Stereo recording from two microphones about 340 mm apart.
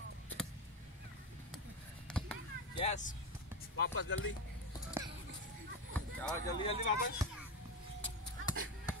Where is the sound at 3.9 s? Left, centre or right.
Left.